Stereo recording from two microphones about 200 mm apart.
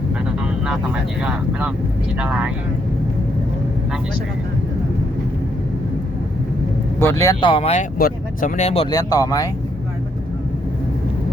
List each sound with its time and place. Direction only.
0.3 s vehicle: 5° right (ahead or behind)
1.2 s speech: 5° right (ahead or behind)
7.0 s speech: 15° left (ahead or behind)
7.5 s speech: 30° left (ahead or behind)
7.9 s speech: 45° left (ahead or behind); by 9.5 s 15° left (ahead or behind)